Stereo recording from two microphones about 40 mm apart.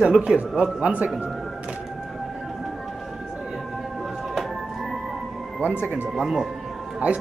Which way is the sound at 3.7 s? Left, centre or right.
Centre.